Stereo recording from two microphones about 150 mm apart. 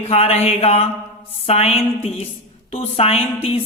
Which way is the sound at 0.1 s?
45° left (ahead or behind).